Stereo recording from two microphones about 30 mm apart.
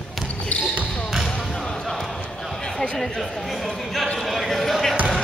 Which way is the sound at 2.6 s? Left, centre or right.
Centre.